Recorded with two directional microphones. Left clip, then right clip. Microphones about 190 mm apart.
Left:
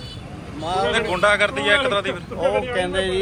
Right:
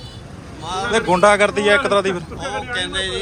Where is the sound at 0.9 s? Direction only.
30° right (ahead or behind).